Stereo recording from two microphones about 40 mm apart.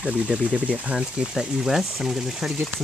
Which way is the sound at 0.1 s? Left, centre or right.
Centre.